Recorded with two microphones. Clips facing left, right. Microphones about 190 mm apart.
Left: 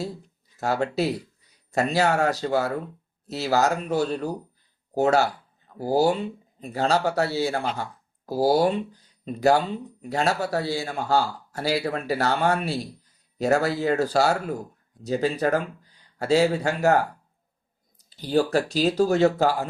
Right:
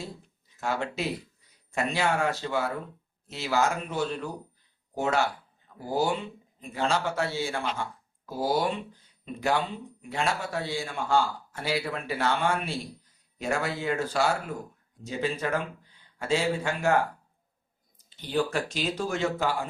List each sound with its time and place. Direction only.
0.5 s speech: 40° left (ahead or behind)
18.1 s speech: 35° left (ahead or behind)